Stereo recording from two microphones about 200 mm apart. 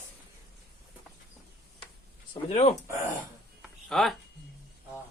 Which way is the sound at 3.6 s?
Centre (ahead or behind).